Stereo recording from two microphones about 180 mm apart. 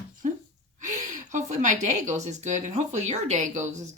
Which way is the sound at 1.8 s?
40° right (ahead or behind).